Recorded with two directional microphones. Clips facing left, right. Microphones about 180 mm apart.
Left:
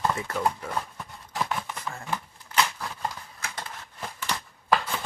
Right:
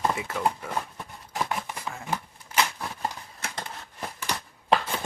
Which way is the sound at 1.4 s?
10° right (ahead or behind).